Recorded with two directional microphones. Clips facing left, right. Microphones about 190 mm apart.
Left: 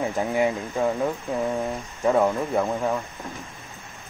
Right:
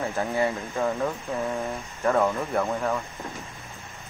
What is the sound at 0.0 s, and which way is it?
Speech, 15° left (ahead or behind).